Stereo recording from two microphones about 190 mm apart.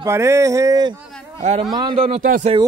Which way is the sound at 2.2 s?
45° right (ahead or behind).